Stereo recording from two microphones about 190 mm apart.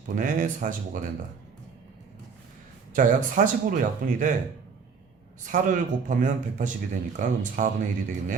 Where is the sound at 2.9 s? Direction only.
45° right (ahead or behind).